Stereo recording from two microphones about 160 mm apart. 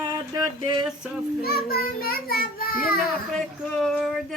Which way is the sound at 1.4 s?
70° left (ahead or behind).